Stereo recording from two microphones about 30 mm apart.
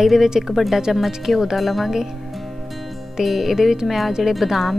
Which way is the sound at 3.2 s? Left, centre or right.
Centre.